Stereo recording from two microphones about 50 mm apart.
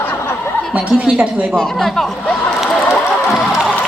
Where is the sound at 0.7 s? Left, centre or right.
Centre.